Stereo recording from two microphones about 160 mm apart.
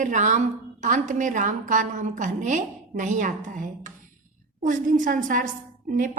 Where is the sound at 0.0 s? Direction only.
50° right (ahead or behind).